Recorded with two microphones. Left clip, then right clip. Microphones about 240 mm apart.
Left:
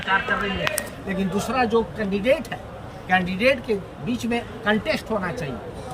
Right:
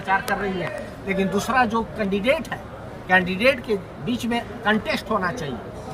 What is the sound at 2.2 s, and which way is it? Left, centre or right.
Speech, centre.